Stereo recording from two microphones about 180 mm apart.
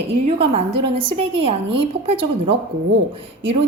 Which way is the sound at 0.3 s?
30° right (ahead or behind).